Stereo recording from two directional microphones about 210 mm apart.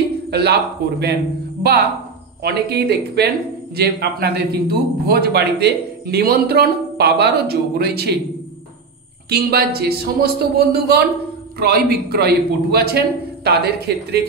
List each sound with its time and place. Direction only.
0.3 s a man's voice: 50° right (ahead or behind)
2.4 s a man's voice: 50° right (ahead or behind)
9.3 s a man's voice: 50° right (ahead or behind)